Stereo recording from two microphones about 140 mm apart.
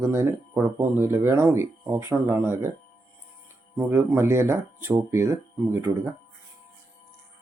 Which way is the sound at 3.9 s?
20° right (ahead or behind).